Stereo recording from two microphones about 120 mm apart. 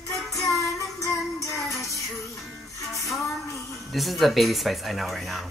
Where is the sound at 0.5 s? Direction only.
25° left (ahead or behind).